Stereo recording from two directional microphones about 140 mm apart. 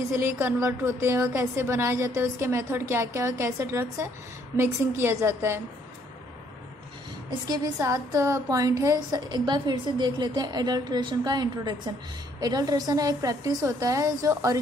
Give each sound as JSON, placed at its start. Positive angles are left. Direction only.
{"t": 0.2, "sound": "a woman's voice", "side_deg": -15}
{"t": 7.2, "sound": "a woman's voice", "side_deg": -30}